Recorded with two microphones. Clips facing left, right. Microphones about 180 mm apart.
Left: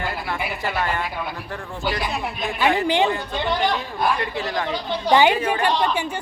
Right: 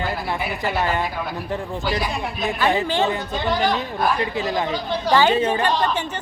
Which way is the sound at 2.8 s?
15° left (ahead or behind).